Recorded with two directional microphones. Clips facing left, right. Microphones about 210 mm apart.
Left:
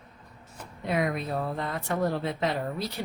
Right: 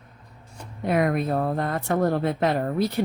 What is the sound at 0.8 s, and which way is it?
Speech, 55° right (ahead or behind).